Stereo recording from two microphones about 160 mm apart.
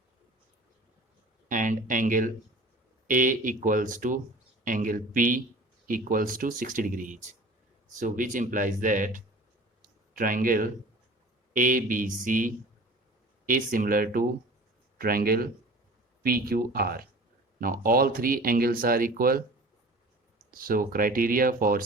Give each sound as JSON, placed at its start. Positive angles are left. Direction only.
{"t": 1.5, "sound": "speech", "side_deg": -55}
{"t": 9.8, "sound": "a sound", "side_deg": -60}
{"t": 11.5, "sound": "speech", "side_deg": -55}
{"t": 20.5, "sound": "speech", "side_deg": -60}